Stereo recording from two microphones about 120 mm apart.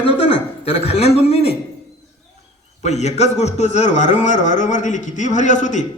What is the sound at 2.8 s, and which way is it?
A man's voice, 70° left (ahead or behind).